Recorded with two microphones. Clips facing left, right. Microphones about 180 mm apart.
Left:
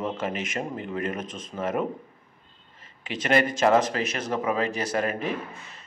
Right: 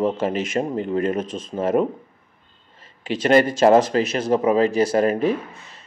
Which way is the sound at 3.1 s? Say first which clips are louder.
Right 7 dB; 35° right (ahead or behind).